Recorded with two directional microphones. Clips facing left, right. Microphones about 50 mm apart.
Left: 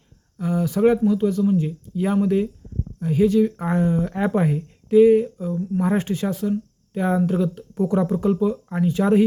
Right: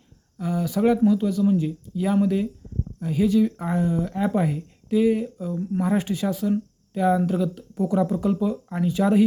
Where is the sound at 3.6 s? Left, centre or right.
Left.